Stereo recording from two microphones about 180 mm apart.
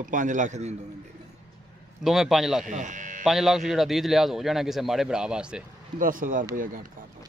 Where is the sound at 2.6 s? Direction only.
45° right (ahead or behind).